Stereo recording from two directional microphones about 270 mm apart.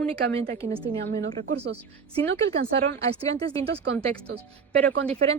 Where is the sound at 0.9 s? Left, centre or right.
Right.